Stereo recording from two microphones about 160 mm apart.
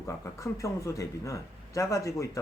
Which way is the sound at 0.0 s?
20° left (ahead or behind).